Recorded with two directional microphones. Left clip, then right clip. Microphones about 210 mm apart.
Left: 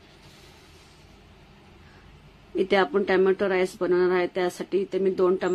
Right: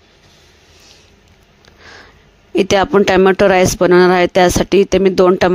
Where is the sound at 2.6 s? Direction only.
50° right (ahead or behind).